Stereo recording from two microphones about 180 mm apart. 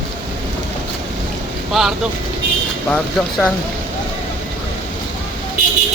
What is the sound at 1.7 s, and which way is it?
Speech, centre (ahead or behind).